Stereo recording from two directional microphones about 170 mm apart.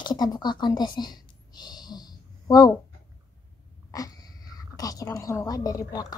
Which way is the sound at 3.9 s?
20° left (ahead or behind).